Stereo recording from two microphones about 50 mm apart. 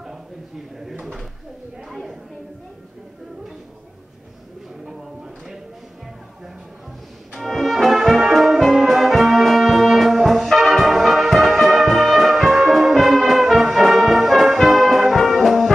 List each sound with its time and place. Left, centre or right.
0.7 s drawer open or close: centre
1.9 s a sound: centre
7.3 s brass instrument: centre